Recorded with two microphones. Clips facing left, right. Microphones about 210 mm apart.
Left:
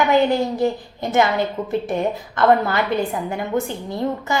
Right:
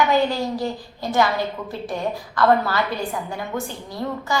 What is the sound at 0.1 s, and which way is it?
A woman's voice, 20° left (ahead or behind).